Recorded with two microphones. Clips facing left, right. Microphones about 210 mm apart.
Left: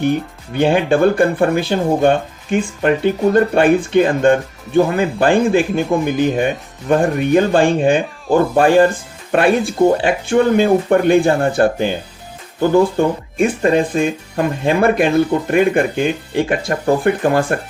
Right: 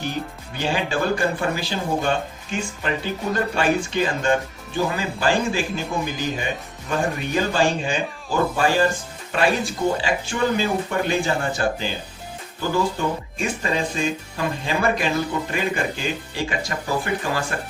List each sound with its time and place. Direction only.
0.0 s speech: 55° left (ahead or behind)
13.3 s speech: 55° left (ahead or behind)